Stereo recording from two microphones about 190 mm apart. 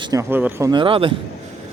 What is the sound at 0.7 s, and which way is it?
Speech, 25° right (ahead or behind).